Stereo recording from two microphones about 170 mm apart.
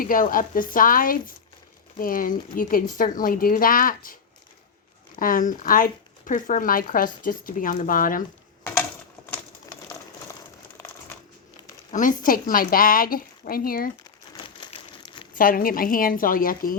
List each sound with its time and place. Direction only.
0.0 s speech: 55° left (ahead or behind)
5.2 s speech: 50° left (ahead or behind)
11.9 s speech: 50° left (ahead or behind)
14.4 s crumpling: 30° left (ahead or behind)
15.4 s speech: 55° left (ahead or behind)